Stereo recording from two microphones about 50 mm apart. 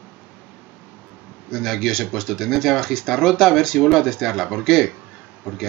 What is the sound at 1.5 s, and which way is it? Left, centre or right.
Speech, centre.